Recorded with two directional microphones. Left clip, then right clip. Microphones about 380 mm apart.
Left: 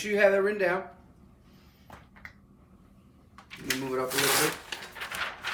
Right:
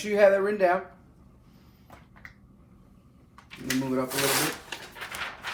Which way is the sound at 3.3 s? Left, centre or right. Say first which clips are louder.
Right 2 dB; centre.